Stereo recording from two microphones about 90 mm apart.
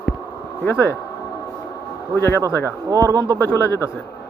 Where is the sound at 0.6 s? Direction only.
30° left (ahead or behind).